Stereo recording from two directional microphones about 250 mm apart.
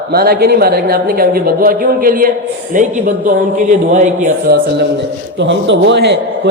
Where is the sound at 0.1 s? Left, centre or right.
Right.